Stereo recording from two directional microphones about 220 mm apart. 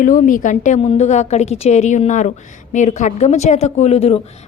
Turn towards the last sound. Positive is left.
turn(degrees=25)  # may be behind; listen again after turning